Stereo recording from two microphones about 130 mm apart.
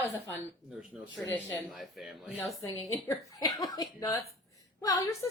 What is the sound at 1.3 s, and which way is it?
Speech, 15° left (ahead or behind).